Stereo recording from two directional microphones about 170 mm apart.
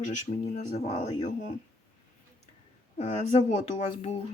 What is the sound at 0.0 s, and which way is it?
Speech, 45° left (ahead or behind).